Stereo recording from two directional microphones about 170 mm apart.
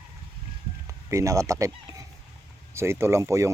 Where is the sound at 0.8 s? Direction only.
20° right (ahead or behind).